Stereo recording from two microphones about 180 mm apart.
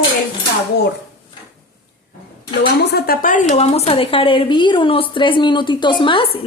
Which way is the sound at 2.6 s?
60° left (ahead or behind).